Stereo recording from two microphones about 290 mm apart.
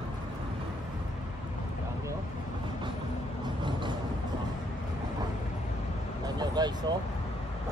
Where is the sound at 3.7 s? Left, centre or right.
Centre.